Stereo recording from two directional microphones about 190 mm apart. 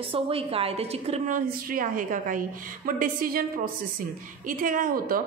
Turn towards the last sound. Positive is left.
turn(degrees=-45)  # may be behind; listen again after turning